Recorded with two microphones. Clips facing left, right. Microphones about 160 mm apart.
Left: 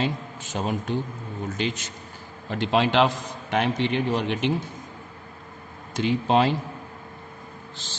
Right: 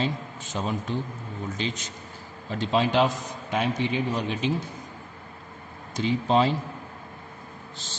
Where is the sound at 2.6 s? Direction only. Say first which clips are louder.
Left 2 dB; 75° left (ahead or behind).